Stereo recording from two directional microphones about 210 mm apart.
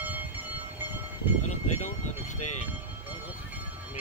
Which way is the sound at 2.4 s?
90° left.